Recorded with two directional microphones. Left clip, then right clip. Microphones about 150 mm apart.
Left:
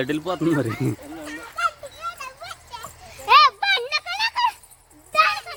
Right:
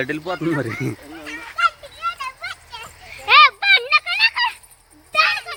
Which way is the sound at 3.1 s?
40° left (ahead or behind).